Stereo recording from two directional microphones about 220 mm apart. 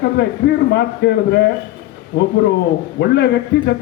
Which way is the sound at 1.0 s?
50° left (ahead or behind).